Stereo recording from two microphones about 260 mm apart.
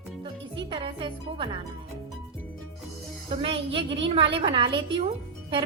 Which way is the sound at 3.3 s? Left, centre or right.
Right.